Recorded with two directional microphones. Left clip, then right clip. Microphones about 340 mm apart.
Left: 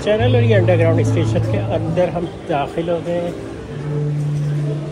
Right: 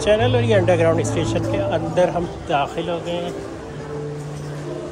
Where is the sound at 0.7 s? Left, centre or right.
Centre.